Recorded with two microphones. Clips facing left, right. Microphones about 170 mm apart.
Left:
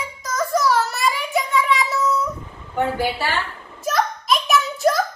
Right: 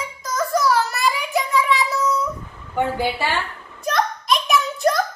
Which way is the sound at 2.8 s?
15° right (ahead or behind).